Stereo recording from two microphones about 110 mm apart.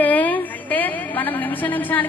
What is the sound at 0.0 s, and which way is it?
A woman's voice, 15° left (ahead or behind).